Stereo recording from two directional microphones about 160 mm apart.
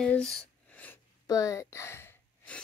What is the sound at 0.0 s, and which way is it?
Speech, 5° left (ahead or behind).